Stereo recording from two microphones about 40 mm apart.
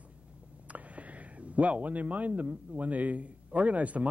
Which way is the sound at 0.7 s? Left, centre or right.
Right.